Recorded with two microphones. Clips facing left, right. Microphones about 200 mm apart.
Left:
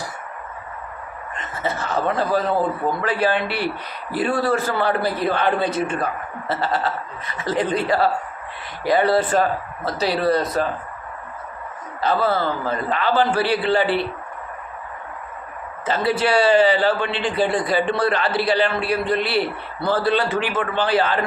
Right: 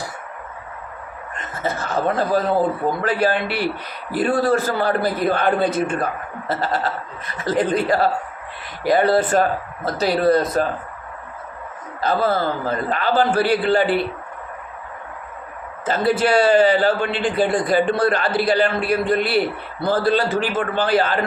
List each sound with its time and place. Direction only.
1.4 s a man's voice: 45° right (ahead or behind)
11.9 s a man's voice: 45° right (ahead or behind)
15.9 s a man's voice: 50° right (ahead or behind)